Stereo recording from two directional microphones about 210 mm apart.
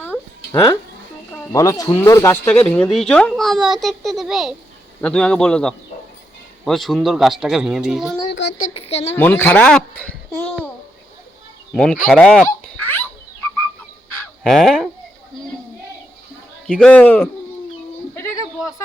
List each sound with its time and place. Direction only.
0.0 s a sound: 10° left (ahead or behind)
1.5 s speech: 15° left (ahead or behind); by 8.2 s centre (ahead or behind)
8.7 s a woman's voice: 30° left (ahead or behind)
9.1 s a child's voice: 10° left (ahead or behind)
11.7 s speech: 5° left (ahead or behind)
14.2 s fowl: centre (ahead or behind)
16.6 s a man's voice: 5° left (ahead or behind)
18.1 s a sound: 15° left (ahead or behind)